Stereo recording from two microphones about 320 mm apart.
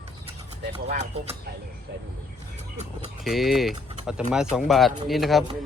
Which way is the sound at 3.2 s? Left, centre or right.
Centre.